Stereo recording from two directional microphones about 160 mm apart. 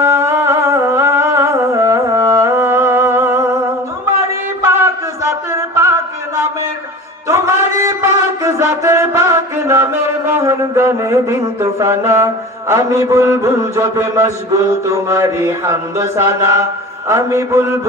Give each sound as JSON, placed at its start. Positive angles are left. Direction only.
{"t": 0.0, "sound": "humming", "side_deg": -15}
{"t": 4.6, "sound": "a sound", "side_deg": -15}
{"t": 7.2, "sound": "music", "side_deg": -15}
{"t": 14.9, "sound": "chant", "side_deg": -15}